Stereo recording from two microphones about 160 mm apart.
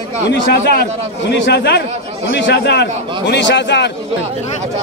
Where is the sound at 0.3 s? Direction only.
85° left.